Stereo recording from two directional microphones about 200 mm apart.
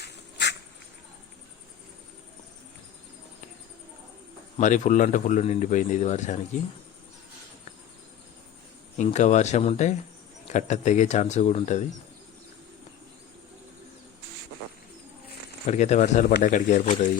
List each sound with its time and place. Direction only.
0.0 s a sound: 60° left (ahead or behind)
4.5 s speech: 35° left (ahead or behind)
9.0 s speech: 35° left (ahead or behind)
15.6 s speech: 35° left (ahead or behind)